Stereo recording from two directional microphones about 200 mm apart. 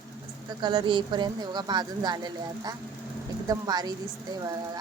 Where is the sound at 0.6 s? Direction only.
25° right (ahead or behind).